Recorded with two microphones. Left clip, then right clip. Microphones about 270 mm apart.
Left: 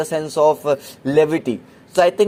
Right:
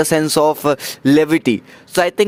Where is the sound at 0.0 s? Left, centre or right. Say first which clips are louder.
Right 3 dB; right.